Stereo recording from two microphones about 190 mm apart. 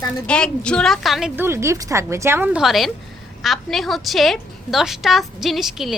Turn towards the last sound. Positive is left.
turn(degrees=0)  # may be behind; listen again after turning